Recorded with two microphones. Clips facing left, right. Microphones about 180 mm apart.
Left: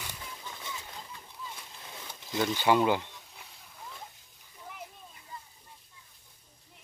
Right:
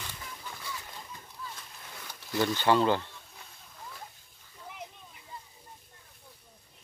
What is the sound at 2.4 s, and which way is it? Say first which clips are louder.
Speech: even; 10° left (ahead or behind).